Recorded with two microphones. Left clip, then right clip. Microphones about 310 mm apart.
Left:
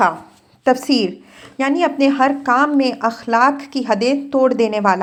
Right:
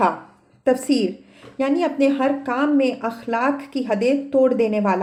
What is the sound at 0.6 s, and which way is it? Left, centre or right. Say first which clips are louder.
Speech: left 3 dB; left.